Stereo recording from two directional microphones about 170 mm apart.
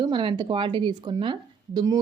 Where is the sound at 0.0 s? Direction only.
30° right (ahead or behind).